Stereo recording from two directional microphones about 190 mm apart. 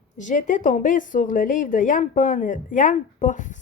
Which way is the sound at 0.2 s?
40° left (ahead or behind).